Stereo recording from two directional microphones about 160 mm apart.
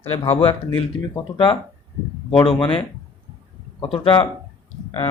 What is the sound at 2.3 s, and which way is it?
Speech, 35° left (ahead or behind).